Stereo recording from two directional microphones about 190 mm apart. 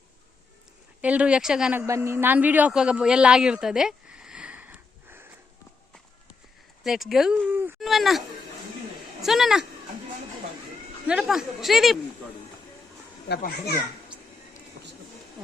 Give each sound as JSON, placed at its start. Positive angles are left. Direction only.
{"t": 1.0, "sound": "speech", "side_deg": -5}
{"t": 1.9, "sound": "a man's voice", "side_deg": -15}
{"t": 6.8, "sound": "speech", "side_deg": 0}
{"t": 7.8, "sound": "a sound", "side_deg": 0}
{"t": 9.2, "sound": "speech", "side_deg": 0}
{"t": 11.1, "sound": "speech", "side_deg": -5}
{"t": 13.2, "sound": "a child's voice", "side_deg": 60}